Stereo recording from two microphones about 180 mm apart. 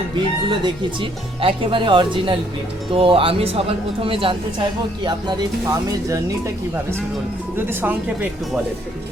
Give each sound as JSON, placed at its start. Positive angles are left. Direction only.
{"t": 1.4, "sound": "speech", "side_deg": -30}
{"t": 7.8, "sound": "speech", "side_deg": -10}